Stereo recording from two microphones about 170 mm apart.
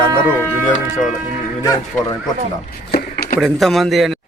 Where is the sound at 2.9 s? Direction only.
65° left (ahead or behind).